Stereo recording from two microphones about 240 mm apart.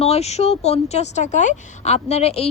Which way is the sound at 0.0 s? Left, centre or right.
Left.